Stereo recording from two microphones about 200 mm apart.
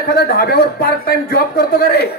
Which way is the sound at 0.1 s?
50° left (ahead or behind).